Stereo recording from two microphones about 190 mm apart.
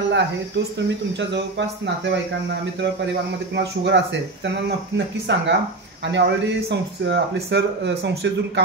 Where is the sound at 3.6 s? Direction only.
65° right (ahead or behind).